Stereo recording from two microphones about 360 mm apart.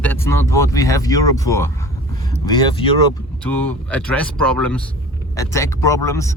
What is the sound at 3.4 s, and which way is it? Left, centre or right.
Speech, centre.